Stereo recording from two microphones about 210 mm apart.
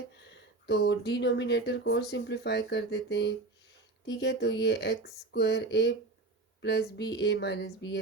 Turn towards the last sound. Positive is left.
turn(degrees=55)  # may be behind; listen again after turning